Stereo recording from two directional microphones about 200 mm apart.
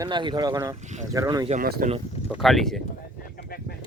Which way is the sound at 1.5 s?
45° right (ahead or behind).